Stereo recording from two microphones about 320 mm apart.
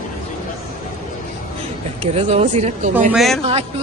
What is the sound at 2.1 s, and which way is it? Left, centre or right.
Speech, centre.